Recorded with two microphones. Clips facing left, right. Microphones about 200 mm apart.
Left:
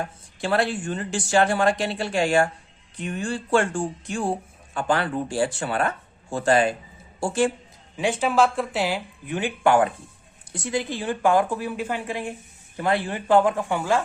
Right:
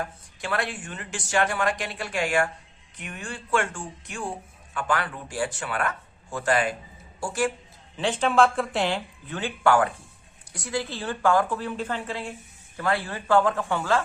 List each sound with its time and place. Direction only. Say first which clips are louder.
0.0 s speech: left 4 dB; 30° left (ahead or behind)
7.9 s speech: left 1 dB; 10° left (ahead or behind)